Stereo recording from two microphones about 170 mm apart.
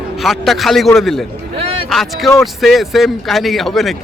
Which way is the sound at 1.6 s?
35° right (ahead or behind).